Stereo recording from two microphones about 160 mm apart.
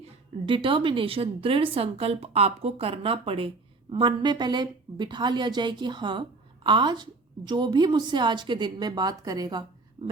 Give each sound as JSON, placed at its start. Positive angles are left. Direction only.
{"t": 0.0, "sound": "a woman's voice", "side_deg": -30}